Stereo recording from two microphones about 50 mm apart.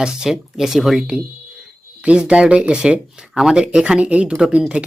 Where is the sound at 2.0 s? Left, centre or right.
Right.